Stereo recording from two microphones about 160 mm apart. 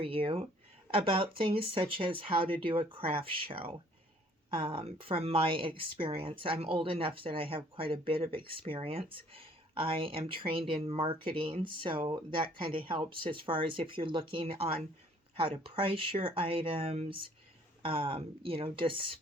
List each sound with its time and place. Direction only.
0.0 s a woman's voice: 35° right (ahead or behind)